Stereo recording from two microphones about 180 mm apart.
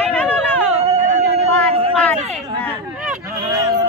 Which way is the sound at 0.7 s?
35° right (ahead or behind).